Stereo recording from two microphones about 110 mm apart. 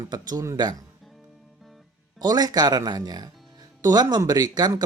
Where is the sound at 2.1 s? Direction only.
35° right (ahead or behind).